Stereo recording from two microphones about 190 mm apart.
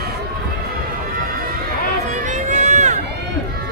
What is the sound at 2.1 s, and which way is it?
Run, 40° right (ahead or behind).